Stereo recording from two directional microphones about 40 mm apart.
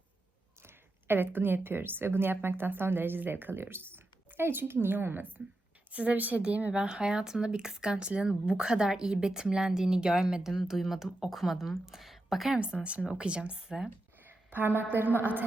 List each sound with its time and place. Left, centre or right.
0.6 s speech: right
5.9 s a woman's voice: right
6.7 s a woman's voice: right; by 12.5 s centre
12.8 s a woman's voice: right
13.7 s speech: centre
14.3 s a sound: right
14.9 s a woman's voice: right